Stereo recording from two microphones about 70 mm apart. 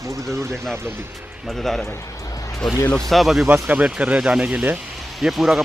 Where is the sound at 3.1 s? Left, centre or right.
Centre.